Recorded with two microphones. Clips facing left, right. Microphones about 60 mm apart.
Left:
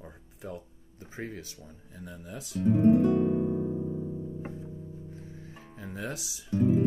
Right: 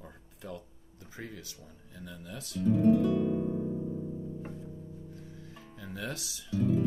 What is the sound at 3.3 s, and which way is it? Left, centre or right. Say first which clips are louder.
Electric piano: left 3 dB; centre.